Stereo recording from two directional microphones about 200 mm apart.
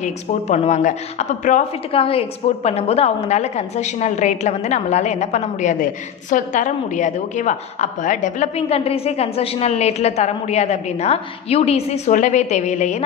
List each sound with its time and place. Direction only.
0.0 s a woman's voice: 35° left (ahead or behind)